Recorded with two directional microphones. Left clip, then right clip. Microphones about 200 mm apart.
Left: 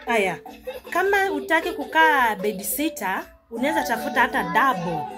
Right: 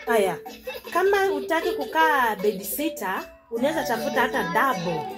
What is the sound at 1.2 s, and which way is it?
Speech, 25° left (ahead or behind).